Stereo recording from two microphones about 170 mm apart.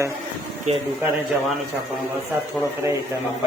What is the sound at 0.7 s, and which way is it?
Speech, 40° right (ahead or behind).